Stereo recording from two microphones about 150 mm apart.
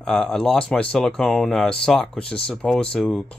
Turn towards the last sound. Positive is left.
turn(degrees=5)  # may be behind; listen again after turning